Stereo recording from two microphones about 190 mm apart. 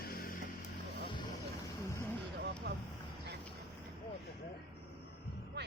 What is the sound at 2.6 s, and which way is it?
Vehicle, 55° right (ahead or behind).